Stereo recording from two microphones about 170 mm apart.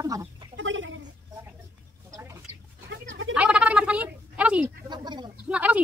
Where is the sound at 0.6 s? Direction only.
90° right.